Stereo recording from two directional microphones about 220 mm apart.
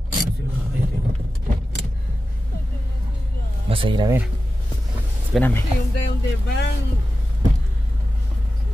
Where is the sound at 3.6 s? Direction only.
25° right (ahead or behind).